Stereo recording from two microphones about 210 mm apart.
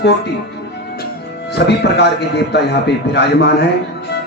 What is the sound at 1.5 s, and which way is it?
A man's voice, 50° left (ahead or behind).